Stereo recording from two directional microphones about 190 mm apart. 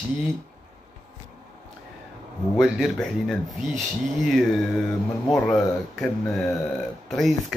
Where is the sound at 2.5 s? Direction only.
Centre (ahead or behind).